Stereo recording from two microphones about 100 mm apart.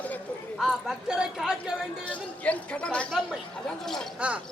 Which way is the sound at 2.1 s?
15° left (ahead or behind).